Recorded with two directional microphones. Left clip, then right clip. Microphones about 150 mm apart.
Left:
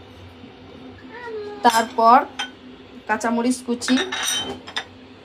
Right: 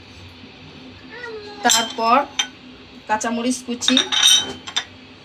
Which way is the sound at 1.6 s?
30° left (ahead or behind).